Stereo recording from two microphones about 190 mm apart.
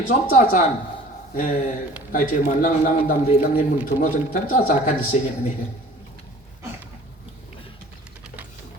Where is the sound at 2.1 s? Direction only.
50° left (ahead or behind).